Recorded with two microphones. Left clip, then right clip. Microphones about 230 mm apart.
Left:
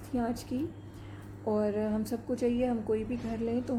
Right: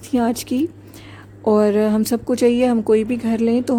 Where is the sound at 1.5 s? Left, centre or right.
Right.